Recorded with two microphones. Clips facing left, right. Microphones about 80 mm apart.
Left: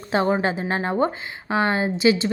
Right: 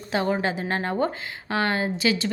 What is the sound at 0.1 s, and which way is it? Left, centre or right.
A woman's voice, left.